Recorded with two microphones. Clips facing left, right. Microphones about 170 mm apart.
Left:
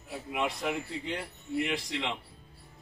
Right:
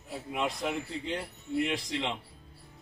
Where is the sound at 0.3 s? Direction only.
Centre (ahead or behind).